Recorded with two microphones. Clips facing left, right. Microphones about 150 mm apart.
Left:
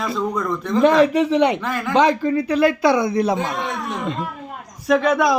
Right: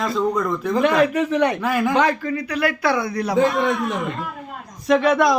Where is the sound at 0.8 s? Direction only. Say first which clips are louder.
Left 4 dB; 30° left (ahead or behind).